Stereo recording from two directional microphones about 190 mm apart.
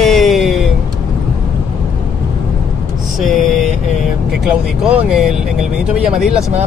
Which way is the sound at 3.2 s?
Centre (ahead or behind).